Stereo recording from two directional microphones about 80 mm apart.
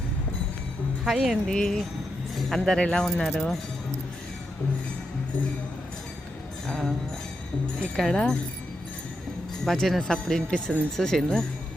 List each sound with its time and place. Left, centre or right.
1.0 s speech: centre
1.5 s speech: centre
6.7 s music: centre
7.9 s speech: centre
9.6 s speech: centre